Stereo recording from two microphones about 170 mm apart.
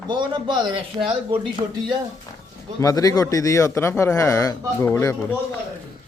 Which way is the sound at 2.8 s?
20° left (ahead or behind).